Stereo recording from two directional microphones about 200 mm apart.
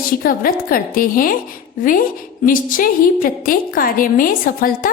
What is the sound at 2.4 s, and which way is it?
A woman's voice, 45° left (ahead or behind).